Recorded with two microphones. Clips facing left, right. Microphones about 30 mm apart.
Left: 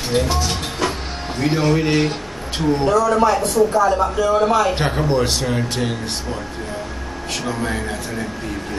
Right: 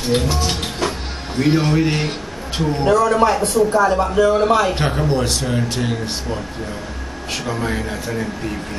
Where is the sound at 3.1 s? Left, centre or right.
Right.